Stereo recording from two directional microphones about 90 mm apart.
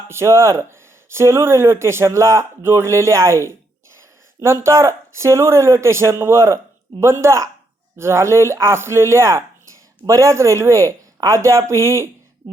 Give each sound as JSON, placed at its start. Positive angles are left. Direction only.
{"t": 0.1, "sound": "speech", "side_deg": -30}